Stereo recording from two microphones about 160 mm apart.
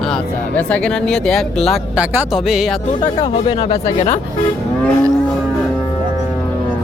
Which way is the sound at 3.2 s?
35° left (ahead or behind).